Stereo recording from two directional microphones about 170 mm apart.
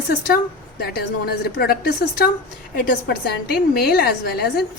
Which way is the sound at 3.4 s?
65° left (ahead or behind).